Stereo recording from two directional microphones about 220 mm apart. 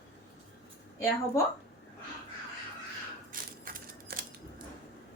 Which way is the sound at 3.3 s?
40° right (ahead or behind).